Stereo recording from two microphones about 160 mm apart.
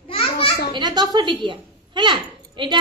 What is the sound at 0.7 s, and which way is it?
Speech, 25° right (ahead or behind).